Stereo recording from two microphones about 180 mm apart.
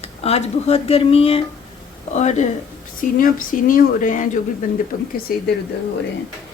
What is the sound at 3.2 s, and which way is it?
Speech, 50° left (ahead or behind).